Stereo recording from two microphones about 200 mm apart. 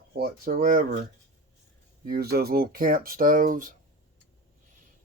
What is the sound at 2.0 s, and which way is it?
Speech, 50° right (ahead or behind).